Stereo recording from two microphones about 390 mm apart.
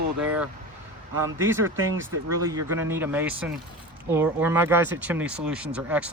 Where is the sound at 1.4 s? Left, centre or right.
Centre.